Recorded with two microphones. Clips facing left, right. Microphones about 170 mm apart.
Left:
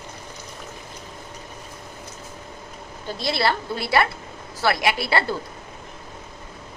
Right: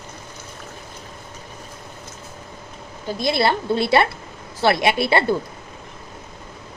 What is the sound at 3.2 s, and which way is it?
A woman's voice, 20° right (ahead or behind).